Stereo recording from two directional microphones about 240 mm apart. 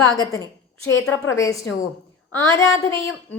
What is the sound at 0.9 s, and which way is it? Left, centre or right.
Speech, left.